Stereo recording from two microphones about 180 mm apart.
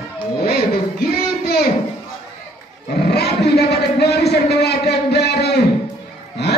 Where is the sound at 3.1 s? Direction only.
65° left (ahead or behind).